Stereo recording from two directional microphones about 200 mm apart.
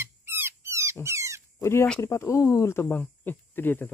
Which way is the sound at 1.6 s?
15° left (ahead or behind).